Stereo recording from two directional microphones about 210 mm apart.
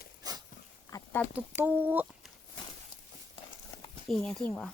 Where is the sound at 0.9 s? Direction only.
10° left (ahead or behind).